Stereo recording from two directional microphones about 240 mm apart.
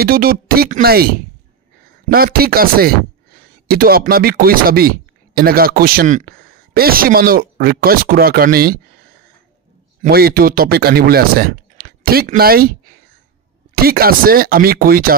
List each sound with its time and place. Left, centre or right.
0.0 s speech: right
10.0 s speech: right
13.8 s speech: right